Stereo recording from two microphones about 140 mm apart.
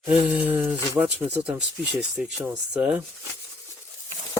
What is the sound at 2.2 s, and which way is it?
Speech, 5° right (ahead or behind).